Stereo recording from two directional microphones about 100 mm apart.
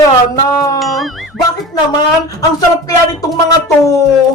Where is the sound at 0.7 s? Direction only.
Centre (ahead or behind).